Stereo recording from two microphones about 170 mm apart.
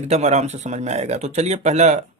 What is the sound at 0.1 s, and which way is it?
Speech, 40° right (ahead or behind).